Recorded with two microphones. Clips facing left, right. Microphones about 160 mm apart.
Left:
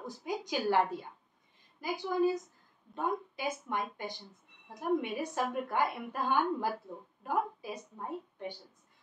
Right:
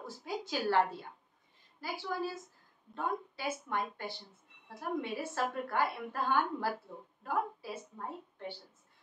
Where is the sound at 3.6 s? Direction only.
15° left (ahead or behind).